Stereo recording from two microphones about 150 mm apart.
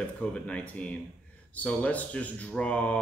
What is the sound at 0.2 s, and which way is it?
A man's voice, 10° left (ahead or behind).